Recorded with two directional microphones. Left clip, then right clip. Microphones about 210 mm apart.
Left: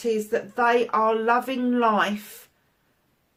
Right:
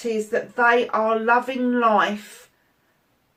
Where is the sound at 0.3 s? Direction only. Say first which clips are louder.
Right 5 dB; 45° left (ahead or behind).